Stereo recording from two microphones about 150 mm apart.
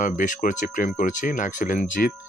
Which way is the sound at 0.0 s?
60° left (ahead or behind).